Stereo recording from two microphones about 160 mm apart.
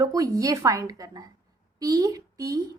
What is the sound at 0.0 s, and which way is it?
A woman's voice, 20° right (ahead or behind).